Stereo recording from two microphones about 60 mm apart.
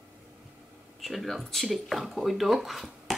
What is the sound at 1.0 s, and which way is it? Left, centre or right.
Speech, centre.